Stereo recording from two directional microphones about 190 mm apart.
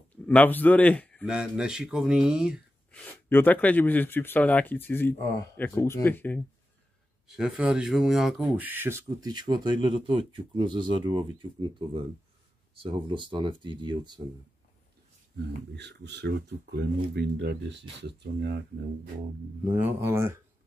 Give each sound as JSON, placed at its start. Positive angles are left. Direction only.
{"t": 0.1, "sound": "speech", "side_deg": 10}
{"t": 1.2, "sound": "speech", "side_deg": -5}
{"t": 2.9, "sound": "speech", "side_deg": 10}
{"t": 7.2, "sound": "speech", "side_deg": -5}
{"t": 15.3, "sound": "speech", "side_deg": -65}
{"t": 19.8, "sound": "speech", "side_deg": -10}